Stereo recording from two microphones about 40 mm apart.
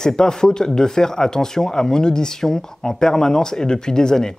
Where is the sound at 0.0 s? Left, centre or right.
Centre.